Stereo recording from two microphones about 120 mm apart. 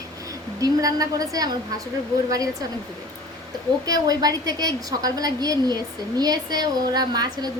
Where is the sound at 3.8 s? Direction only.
30° right (ahead or behind).